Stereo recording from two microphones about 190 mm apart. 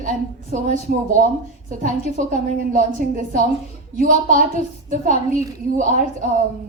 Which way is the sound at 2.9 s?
45° right (ahead or behind).